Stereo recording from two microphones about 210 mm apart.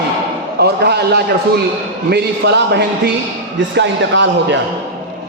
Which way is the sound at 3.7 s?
55° right (ahead or behind).